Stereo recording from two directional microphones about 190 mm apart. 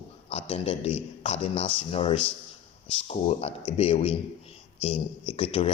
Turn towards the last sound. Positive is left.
turn(degrees=30)  # may be behind; listen again after turning